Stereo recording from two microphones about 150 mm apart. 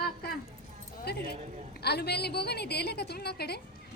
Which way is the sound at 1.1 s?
90° left.